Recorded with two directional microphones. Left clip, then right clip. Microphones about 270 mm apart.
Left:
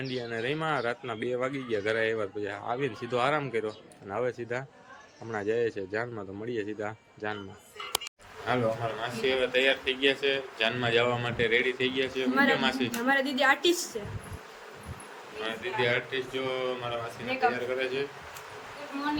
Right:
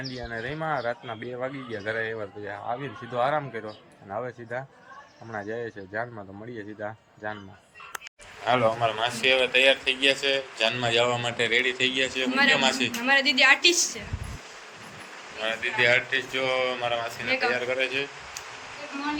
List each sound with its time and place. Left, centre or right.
0.2 s speech: centre
8.4 s speech: centre
13.0 s a woman's voice: left
15.4 s speech: centre